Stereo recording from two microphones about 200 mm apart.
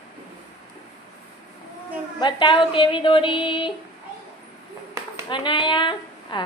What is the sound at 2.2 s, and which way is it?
A woman's voice, 25° left (ahead or behind).